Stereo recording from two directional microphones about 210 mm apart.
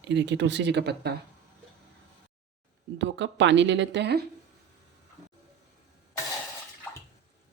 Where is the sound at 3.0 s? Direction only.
60° right (ahead or behind).